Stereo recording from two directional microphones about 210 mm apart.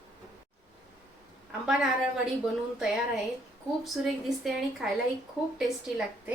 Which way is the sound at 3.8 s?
Centre (ahead or behind).